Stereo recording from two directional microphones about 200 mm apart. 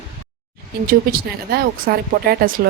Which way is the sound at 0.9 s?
50° right (ahead or behind).